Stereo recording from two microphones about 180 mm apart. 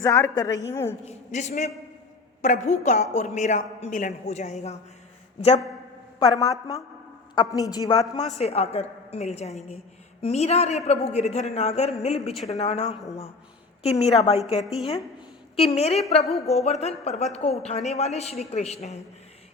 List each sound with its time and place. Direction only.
0.0 s a woman's voice: 20° left (ahead or behind)
1.0 s a woman's voice: 40° left (ahead or behind); by 8.0 s 20° left (ahead or behind)
8.4 s a woman's voice: 35° left (ahead or behind)
14.0 s a woman's voice: 35° left (ahead or behind)
14.6 s speech: centre (ahead or behind)
15.5 s a woman's voice: 35° left (ahead or behind)